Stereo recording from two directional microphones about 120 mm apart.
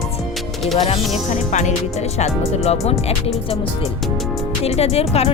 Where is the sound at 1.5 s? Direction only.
75° left (ahead or behind).